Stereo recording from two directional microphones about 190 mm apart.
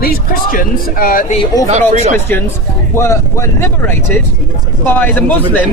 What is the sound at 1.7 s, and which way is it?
Speech, 35° right (ahead or behind).